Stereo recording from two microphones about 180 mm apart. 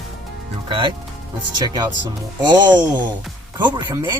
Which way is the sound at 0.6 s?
30° right (ahead or behind).